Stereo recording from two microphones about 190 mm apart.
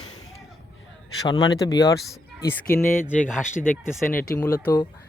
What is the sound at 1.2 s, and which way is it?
Speech, 20° left (ahead or behind).